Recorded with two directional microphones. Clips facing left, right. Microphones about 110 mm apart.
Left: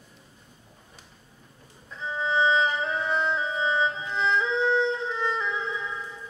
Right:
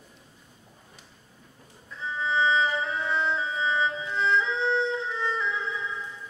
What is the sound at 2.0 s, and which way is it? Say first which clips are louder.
Music: left 1 dB; 20° left (ahead or behind).